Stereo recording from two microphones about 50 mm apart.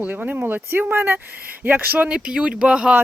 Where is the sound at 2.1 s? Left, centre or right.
Centre.